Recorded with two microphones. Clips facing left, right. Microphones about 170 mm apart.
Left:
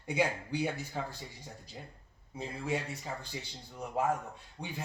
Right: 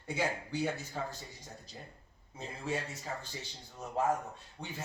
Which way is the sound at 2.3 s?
15° left (ahead or behind).